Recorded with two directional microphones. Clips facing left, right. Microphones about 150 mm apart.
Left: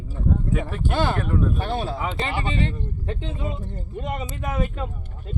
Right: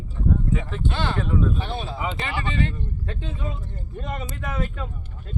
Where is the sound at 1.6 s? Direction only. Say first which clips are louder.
Left 4 dB; 45° left (ahead or behind).